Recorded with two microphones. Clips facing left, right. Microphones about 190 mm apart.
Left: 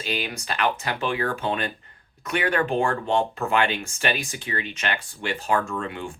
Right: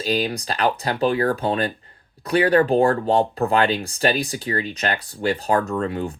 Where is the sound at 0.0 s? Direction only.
35° right (ahead or behind).